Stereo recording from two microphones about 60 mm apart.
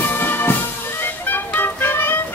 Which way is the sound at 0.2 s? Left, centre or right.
Left.